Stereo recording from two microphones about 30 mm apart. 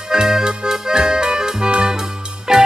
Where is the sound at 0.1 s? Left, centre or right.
Right.